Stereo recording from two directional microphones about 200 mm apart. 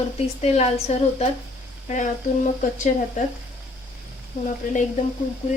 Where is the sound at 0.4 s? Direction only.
30° left (ahead or behind).